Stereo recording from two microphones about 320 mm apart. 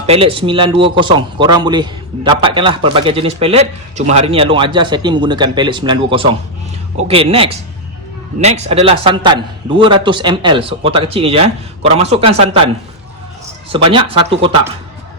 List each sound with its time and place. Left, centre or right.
0.0 s speech: centre
13.7 s speech: centre